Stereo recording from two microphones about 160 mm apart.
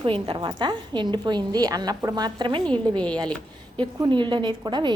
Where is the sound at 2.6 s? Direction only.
5° left (ahead or behind).